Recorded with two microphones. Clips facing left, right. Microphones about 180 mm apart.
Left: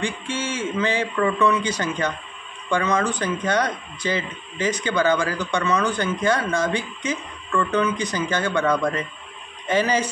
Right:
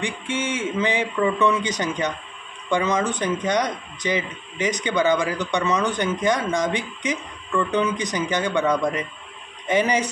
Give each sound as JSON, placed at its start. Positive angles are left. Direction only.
{"t": 0.0, "sound": "a man's voice", "side_deg": -20}